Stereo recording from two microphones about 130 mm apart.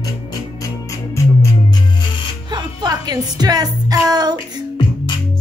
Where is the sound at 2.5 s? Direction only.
30° right (ahead or behind).